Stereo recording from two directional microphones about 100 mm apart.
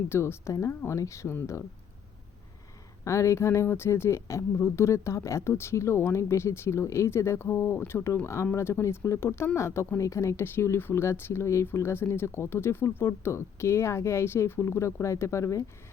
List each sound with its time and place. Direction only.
0.1 s speech: 25° left (ahead or behind)
3.0 s speech: 30° left (ahead or behind)